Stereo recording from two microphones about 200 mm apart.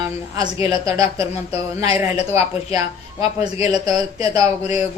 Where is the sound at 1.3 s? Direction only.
30° left (ahead or behind).